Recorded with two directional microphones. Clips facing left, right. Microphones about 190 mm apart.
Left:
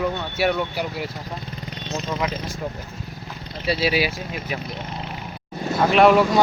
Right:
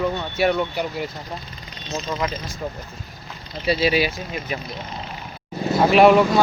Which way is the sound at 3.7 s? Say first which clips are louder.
Right 2 dB; 5° left (ahead or behind).